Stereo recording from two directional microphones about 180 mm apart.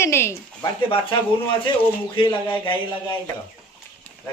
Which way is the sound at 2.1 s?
30° left (ahead or behind).